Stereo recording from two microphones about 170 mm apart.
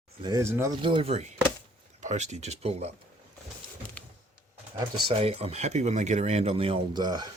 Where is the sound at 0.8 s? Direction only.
30° right (ahead or behind).